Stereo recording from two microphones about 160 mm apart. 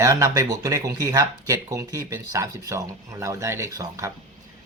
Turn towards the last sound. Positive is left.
turn(degrees=-20)  # may be behind; listen again after turning